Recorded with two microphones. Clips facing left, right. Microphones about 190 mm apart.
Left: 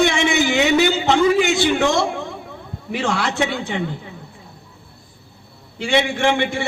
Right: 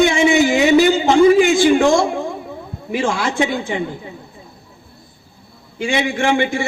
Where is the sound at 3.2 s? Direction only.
45° right (ahead or behind).